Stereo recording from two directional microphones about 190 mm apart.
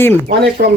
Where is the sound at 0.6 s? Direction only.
45° right (ahead or behind).